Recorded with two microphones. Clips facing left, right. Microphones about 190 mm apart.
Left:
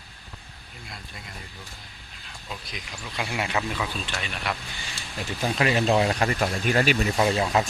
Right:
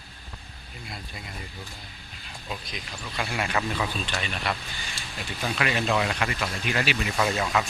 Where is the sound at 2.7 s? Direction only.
15° left (ahead or behind).